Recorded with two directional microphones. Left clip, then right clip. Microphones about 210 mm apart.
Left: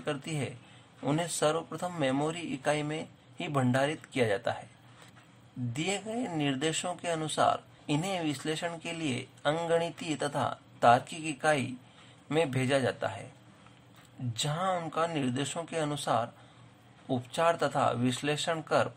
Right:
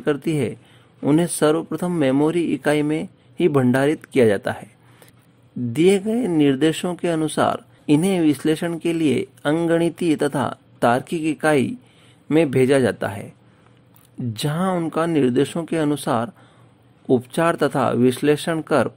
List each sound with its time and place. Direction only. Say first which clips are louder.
0.0 s speech: right 14 dB; 40° right (ahead or behind)
5.7 s speech: right 17 dB; 45° right (ahead or behind)
14.3 s speech: right 7 dB; 45° right (ahead or behind)